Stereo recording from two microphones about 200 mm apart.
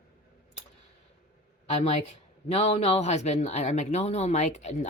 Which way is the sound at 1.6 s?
30° left (ahead or behind).